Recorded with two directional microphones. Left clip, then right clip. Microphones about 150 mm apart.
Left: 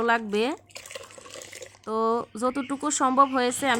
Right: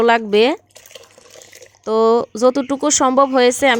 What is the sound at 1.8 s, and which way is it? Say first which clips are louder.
Speech: right 11 dB; 45° right (ahead or behind).